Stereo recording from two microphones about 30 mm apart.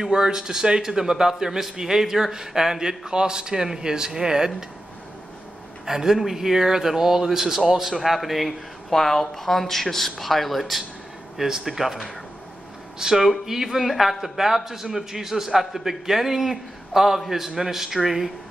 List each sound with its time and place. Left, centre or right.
0.1 s a man's voice: right
5.9 s a man's voice: centre
8.9 s speech: centre
11.4 s a man's voice: centre
13.0 s a man's voice: centre